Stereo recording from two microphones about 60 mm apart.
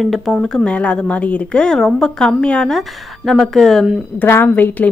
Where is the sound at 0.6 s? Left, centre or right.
Left.